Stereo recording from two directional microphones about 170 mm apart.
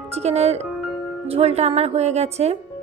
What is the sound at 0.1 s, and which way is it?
A woman's voice, 40° right (ahead or behind).